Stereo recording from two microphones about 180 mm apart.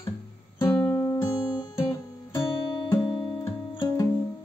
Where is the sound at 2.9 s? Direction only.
25° left (ahead or behind).